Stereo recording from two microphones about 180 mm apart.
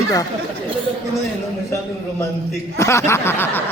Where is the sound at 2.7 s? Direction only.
15° left (ahead or behind).